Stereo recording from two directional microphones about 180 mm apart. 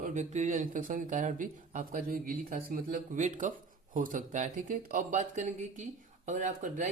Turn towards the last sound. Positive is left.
turn(degrees=-45)  # may be behind; listen again after turning